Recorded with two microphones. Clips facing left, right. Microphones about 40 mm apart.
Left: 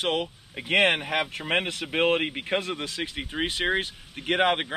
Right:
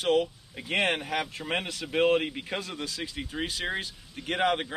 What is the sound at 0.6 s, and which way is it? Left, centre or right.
Speech, left.